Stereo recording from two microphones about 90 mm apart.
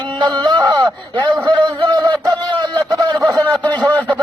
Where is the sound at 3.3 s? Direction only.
45° right (ahead or behind).